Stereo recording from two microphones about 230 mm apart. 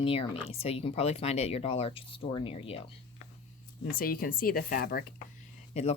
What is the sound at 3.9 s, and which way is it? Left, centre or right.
Speech, left.